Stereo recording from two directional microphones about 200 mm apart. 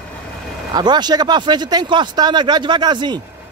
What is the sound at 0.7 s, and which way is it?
Speech, 20° right (ahead or behind).